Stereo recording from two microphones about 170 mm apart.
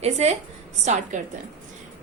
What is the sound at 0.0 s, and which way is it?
A woman's voice, 40° right (ahead or behind).